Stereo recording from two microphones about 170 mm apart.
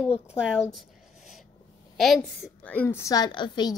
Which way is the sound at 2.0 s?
Centre (ahead or behind).